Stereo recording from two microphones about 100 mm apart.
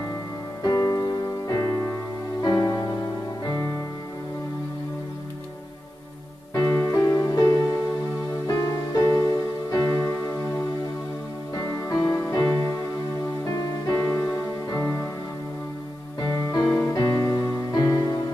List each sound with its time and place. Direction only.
0.6 s music: 35° left (ahead or behind)
6.5 s music: 25° left (ahead or behind)
16.2 s music: 40° left (ahead or behind)